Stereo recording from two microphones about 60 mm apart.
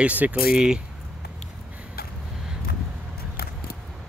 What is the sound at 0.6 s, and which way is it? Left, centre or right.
Speech, centre.